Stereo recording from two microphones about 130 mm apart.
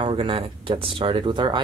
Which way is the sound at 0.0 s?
40° right (ahead or behind).